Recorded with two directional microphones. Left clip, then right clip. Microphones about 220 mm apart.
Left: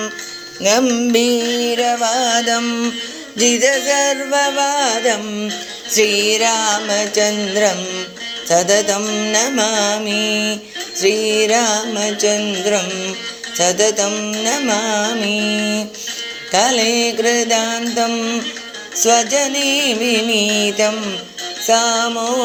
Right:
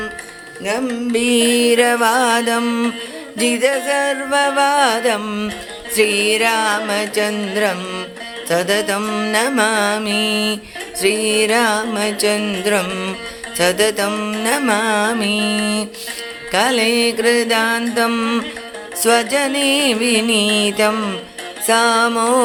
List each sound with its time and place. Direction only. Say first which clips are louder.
0.6 s music: left 6 dB; 10° left (ahead or behind)
1.5 s music: right 3 dB; 30° right (ahead or behind)
3.3 s music: left 2 dB; 5° right (ahead or behind)
5.9 s music: left 1 dB; 5° right (ahead or behind)